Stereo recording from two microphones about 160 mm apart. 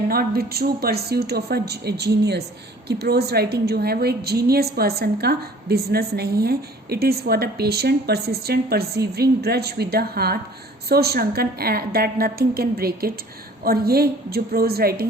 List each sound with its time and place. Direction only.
0.1 s a woman's voice: 75° right (ahead or behind)